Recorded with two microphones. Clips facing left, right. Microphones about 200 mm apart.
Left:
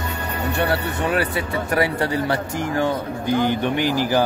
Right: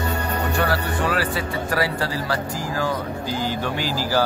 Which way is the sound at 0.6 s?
25° left (ahead or behind).